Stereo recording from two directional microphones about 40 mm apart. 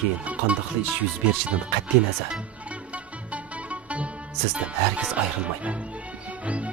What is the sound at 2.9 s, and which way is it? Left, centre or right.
Music, right.